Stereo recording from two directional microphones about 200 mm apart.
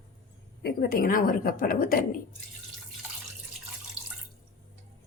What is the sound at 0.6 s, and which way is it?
A woman's voice, 50° left (ahead or behind).